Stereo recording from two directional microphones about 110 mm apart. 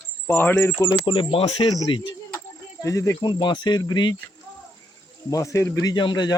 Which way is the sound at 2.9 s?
30° left (ahead or behind).